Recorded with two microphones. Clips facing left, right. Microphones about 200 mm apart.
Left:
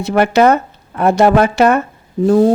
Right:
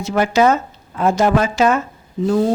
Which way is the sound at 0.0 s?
60° left (ahead or behind).